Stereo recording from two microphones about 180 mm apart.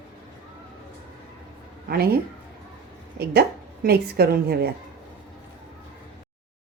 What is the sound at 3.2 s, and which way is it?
A woman's voice, 60° right (ahead or behind).